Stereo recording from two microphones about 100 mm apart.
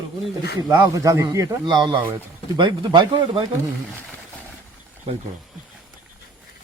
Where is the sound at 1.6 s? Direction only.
50° right (ahead or behind).